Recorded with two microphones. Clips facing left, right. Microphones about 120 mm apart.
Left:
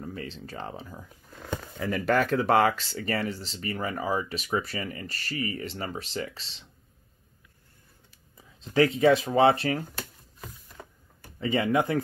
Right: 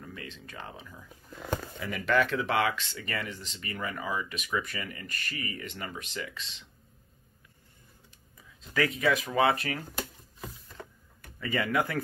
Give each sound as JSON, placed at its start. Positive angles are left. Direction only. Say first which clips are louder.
{"t": 0.0, "sound": "speech", "louder": "left 6 dB", "side_deg": 35}
{"t": 8.5, "sound": "speech", "louder": "left 7 dB", "side_deg": 30}
{"t": 10.8, "sound": "a sound", "louder": "right 1 dB", "side_deg": 5}
{"t": 11.1, "sound": "speech", "louder": "left 4 dB", "side_deg": 25}